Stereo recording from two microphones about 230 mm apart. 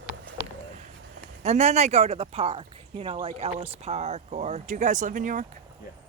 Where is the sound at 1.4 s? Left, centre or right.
Right.